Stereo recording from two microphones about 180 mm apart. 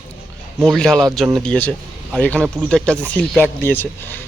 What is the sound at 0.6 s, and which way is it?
Speech, centre (ahead or behind).